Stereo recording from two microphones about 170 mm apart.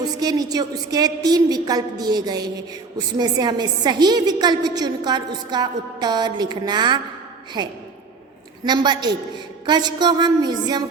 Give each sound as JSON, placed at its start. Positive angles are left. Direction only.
{"t": 0.0, "sound": "a woman's voice", "side_deg": -20}